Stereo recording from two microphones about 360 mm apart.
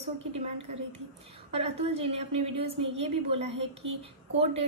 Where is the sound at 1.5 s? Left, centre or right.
Centre.